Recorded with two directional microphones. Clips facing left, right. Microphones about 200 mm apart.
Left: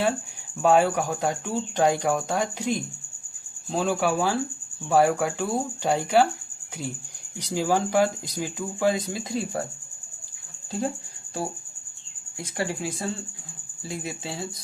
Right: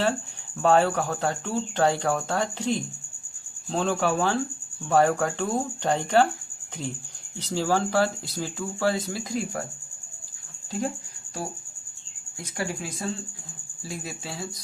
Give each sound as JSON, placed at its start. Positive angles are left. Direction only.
{"t": 0.6, "sound": "speech", "side_deg": 10}
{"t": 7.3, "sound": "speech", "side_deg": 15}
{"t": 10.7, "sound": "speech", "side_deg": 30}
{"t": 12.4, "sound": "speech", "side_deg": 25}